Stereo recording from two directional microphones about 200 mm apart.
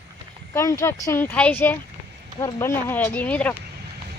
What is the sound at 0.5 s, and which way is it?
A woman's voice, 15° left (ahead or behind).